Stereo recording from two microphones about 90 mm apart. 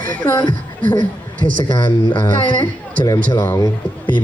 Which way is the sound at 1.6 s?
65° left (ahead or behind).